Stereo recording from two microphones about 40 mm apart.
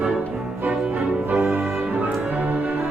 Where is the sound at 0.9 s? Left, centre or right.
Right.